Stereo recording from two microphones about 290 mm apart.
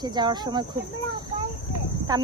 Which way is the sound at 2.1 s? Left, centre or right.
Centre.